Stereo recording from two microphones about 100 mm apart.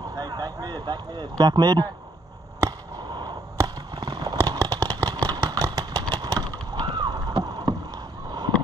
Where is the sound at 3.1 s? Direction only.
50° right (ahead or behind).